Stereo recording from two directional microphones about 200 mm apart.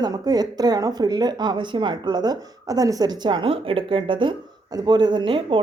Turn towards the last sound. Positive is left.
turn(degrees=-25)  # may be behind; listen again after turning